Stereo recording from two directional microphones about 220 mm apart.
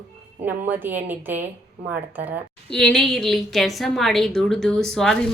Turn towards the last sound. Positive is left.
turn(degrees=0)  # may be behind; listen again after turning